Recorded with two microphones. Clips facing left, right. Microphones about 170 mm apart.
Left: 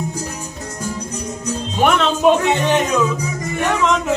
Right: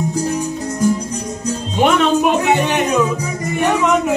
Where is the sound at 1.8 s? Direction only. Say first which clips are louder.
Right 3 dB; 15° right (ahead or behind).